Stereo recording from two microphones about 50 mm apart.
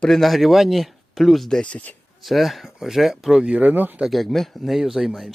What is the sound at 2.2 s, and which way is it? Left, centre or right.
Speech, centre.